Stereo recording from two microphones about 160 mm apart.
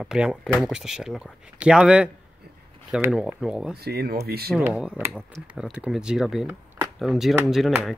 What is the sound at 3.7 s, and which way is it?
Speech, 80° right.